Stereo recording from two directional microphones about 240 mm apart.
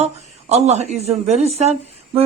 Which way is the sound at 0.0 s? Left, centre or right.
Right.